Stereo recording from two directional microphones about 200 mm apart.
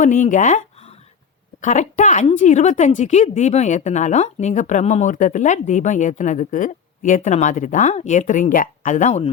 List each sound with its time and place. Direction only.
0.0 s speech: 40° left (ahead or behind)